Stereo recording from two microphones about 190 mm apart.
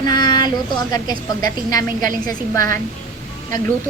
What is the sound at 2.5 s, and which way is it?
Speech, 45° right (ahead or behind).